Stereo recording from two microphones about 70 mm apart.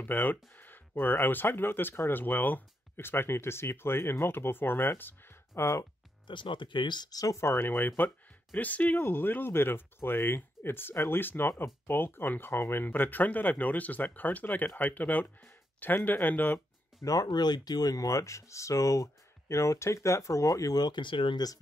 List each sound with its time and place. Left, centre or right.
0.0 s speech: left
5.6 s speech: left
6.2 s speech: left
7.3 s speech: left
17.0 s speech: left
17.9 s speech: left